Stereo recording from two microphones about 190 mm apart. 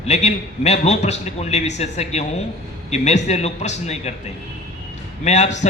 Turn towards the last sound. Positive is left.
turn(degrees=40)  # may be behind; listen again after turning